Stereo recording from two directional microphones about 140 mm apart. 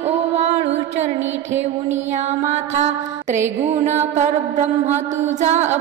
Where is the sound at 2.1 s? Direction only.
55° right (ahead or behind).